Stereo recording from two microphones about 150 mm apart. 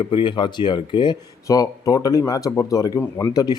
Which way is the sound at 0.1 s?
30° left (ahead or behind).